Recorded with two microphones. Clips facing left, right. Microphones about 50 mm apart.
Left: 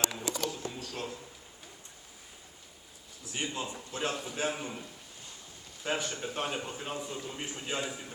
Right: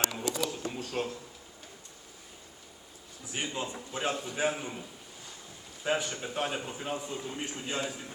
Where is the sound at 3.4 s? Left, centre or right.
Centre.